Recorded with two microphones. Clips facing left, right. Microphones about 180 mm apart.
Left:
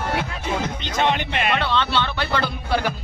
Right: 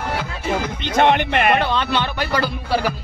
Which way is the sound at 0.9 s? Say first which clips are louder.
Right 7 dB; 55° right (ahead or behind).